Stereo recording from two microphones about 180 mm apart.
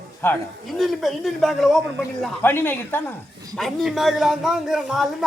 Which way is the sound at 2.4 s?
10° left (ahead or behind).